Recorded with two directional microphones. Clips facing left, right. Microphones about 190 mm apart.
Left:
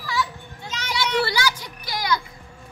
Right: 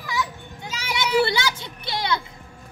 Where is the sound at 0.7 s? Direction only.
10° right (ahead or behind).